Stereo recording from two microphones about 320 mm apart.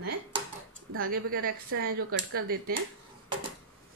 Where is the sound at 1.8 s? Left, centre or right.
Right.